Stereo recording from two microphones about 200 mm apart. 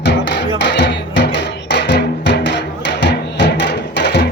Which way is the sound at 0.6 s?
60° left (ahead or behind).